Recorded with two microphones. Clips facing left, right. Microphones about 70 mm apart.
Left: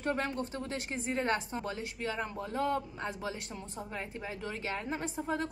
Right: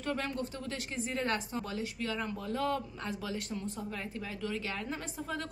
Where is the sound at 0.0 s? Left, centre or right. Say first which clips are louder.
Left 2 dB; left.